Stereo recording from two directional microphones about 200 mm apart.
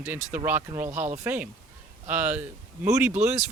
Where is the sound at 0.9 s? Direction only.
35° right (ahead or behind).